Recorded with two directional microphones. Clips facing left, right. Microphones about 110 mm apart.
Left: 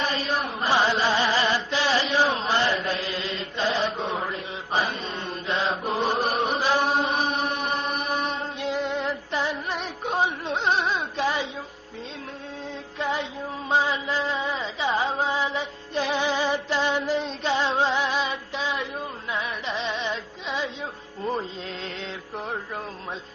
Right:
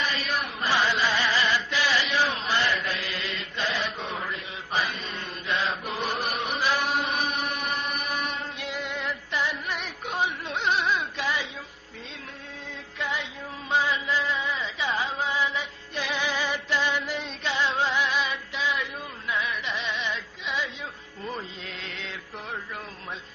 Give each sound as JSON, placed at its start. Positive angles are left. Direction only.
{"t": 0.0, "sound": "chant", "side_deg": 30}
{"t": 13.0, "sound": "music", "side_deg": 35}
{"t": 13.7, "sound": "a sound", "side_deg": 30}
{"t": 19.3, "sound": "music", "side_deg": 30}
{"t": 21.2, "sound": "mantra", "side_deg": 35}